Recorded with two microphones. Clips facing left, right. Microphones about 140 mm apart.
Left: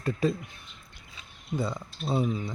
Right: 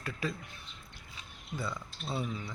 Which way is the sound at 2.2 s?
30° left (ahead or behind).